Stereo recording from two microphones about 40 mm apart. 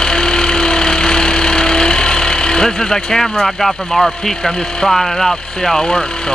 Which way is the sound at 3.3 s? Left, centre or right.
Centre.